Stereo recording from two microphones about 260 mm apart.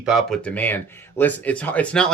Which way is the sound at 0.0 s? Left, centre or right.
Centre.